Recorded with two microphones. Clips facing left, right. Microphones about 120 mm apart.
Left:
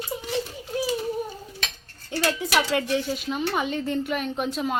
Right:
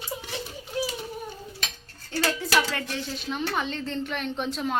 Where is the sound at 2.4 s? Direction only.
15° left (ahead or behind).